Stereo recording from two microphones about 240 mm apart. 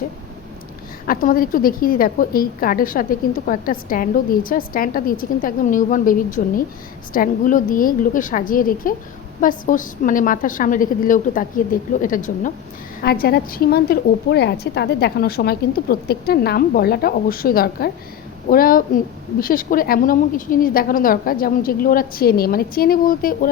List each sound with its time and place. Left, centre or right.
1.0 s a woman's voice: left